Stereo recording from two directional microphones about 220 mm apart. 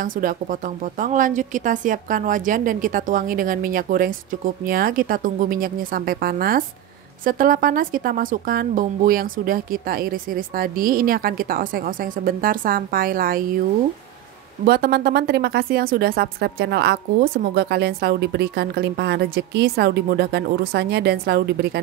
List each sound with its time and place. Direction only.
0.0 s speech: 40° right (ahead or behind)
14.6 s speech: 45° right (ahead or behind)